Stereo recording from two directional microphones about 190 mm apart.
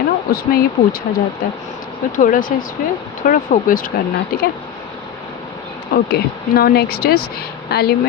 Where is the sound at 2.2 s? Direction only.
45° left (ahead or behind).